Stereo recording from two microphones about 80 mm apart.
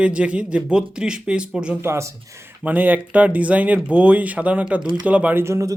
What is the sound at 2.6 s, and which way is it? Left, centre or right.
Speech, right.